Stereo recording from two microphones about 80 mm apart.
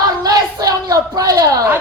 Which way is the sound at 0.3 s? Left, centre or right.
Right.